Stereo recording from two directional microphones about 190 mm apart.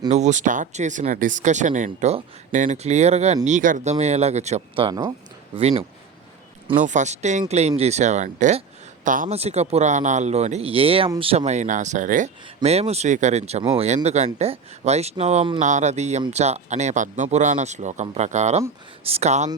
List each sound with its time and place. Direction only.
0.1 s speech: 40° right (ahead or behind); by 5.1 s 20° right (ahead or behind)
6.7 s speech: 40° right (ahead or behind)